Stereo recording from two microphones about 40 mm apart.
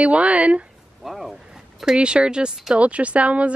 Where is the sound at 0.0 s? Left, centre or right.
Right.